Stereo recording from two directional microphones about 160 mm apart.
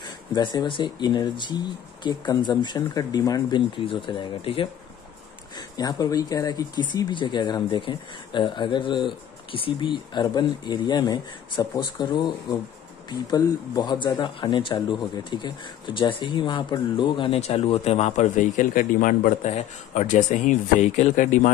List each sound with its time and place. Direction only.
0.0 s speech: 25° left (ahead or behind)
5.8 s speech: 25° left (ahead or behind); by 21.5 s 50° left (ahead or behind)